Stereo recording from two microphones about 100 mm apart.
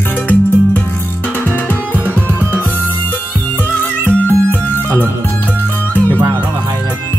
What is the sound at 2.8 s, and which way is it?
Music, 20° left (ahead or behind).